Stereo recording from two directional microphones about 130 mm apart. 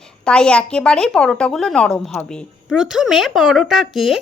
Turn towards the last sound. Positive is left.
turn(degrees=0)  # may be behind; listen again after turning